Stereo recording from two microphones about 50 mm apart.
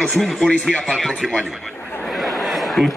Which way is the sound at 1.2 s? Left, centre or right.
Centre.